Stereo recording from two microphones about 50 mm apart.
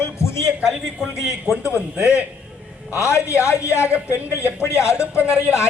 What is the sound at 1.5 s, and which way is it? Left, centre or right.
Speech, left.